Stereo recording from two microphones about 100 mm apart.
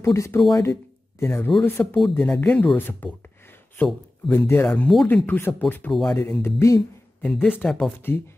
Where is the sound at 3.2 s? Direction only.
20° left (ahead or behind).